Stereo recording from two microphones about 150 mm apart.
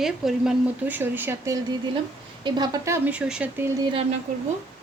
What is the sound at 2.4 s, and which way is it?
Speech, 30° right (ahead or behind).